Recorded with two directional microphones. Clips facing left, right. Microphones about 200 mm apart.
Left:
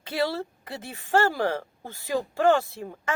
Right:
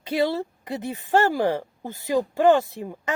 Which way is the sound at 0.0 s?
20° right (ahead or behind).